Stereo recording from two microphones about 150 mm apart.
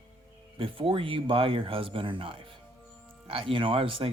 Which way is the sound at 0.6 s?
35° right (ahead or behind).